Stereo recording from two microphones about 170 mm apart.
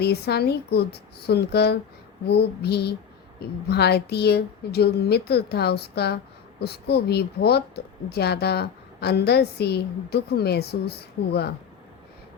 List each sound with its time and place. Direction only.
0.0 s a woman's voice: 70° left (ahead or behind)